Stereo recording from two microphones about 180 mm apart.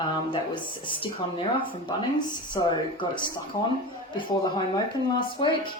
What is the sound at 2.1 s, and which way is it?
Speech, 25° left (ahead or behind).